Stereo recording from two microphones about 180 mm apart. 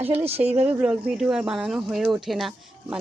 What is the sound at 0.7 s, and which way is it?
Speech, 5° right (ahead or behind).